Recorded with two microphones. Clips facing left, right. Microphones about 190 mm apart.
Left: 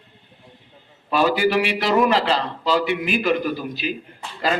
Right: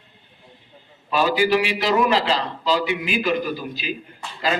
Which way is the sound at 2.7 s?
55° left (ahead or behind).